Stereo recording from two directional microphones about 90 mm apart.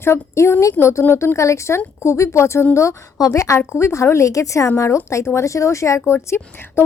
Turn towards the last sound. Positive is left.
turn(degrees=25)  # may be behind; listen again after turning